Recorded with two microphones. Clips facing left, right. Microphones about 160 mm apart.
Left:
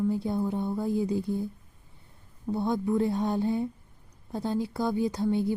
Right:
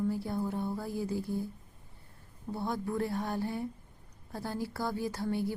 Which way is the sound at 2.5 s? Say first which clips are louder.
Left 7 dB; 20° left (ahead or behind).